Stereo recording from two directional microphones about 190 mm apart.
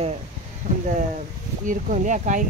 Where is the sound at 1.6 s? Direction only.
45° right (ahead or behind).